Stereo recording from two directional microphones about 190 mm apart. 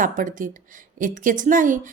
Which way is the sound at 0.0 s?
45° right (ahead or behind).